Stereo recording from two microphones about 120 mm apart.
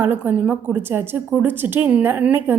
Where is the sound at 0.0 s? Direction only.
15° right (ahead or behind).